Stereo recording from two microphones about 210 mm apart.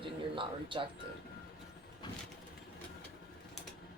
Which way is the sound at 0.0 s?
25° right (ahead or behind).